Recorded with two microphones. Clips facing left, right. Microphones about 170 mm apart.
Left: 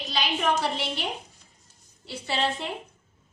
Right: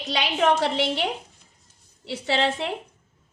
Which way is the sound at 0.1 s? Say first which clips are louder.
Right 5 dB; 85° right.